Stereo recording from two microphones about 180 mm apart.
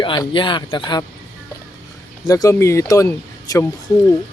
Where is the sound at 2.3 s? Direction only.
15° left (ahead or behind).